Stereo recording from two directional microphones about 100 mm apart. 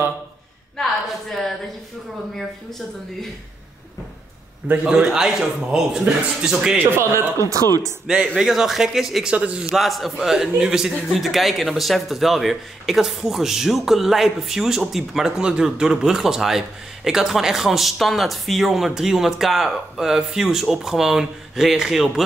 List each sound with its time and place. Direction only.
4.6 s a man's voice: 10° right (ahead or behind)
7.0 s a man's voice: 30° right (ahead or behind)
8.4 s a man's voice: 5° right (ahead or behind)
9.7 s a man's voice: centre (ahead or behind)